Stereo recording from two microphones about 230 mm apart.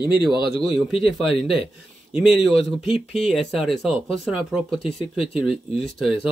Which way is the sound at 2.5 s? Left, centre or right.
Left.